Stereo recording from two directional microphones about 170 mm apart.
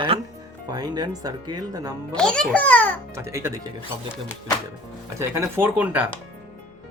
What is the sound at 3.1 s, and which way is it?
Speech, 15° right (ahead or behind).